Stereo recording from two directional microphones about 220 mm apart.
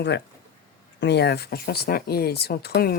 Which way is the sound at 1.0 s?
50° left (ahead or behind).